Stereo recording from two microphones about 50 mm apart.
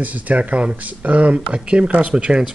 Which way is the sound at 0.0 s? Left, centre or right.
Right.